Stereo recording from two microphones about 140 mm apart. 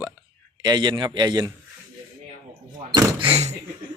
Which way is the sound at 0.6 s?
30° right (ahead or behind).